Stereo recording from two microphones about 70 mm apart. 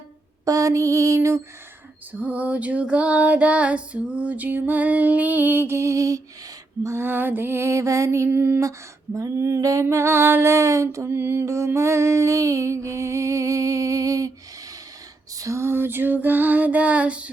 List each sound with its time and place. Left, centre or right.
0.4 s music: right
2.1 s music: right
6.8 s music: right
8.3 s music: right
9.1 s music: right
11.1 s music: right
15.4 s music: right; by 17.3 s centre